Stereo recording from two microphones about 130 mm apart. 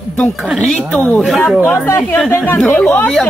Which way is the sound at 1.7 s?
25° left (ahead or behind).